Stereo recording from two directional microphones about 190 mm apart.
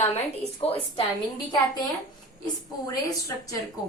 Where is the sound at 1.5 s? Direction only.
20° left (ahead or behind).